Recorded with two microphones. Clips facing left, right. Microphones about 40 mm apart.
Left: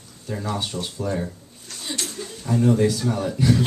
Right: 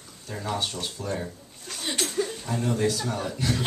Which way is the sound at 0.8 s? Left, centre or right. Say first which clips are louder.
Left 5 dB; centre.